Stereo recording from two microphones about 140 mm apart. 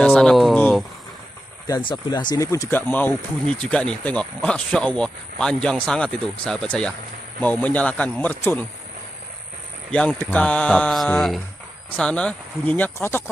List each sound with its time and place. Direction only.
0.0 s a sound: 5° left (ahead or behind)
1.7 s speech: 35° left (ahead or behind)
2.7 s speech: 15° left (ahead or behind)
9.8 s speech: 10° left (ahead or behind)